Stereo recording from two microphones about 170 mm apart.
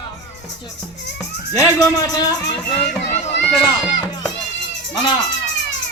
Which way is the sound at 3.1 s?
45° left (ahead or behind).